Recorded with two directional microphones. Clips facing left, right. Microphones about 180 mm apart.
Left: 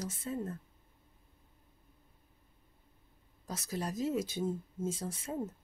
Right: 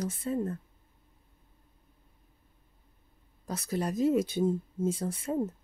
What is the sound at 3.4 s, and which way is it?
Speech, 60° right (ahead or behind).